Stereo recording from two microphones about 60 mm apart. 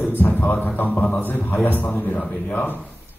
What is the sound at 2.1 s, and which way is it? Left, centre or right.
Speech, centre.